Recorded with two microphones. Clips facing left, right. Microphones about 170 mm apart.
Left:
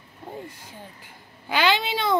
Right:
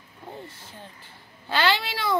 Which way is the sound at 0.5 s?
15° left (ahead or behind).